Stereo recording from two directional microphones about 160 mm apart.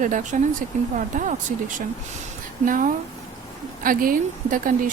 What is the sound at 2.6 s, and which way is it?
Speech, 60° right (ahead or behind).